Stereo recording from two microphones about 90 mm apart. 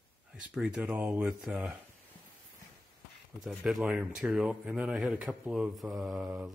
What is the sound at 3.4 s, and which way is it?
Speech, centre (ahead or behind).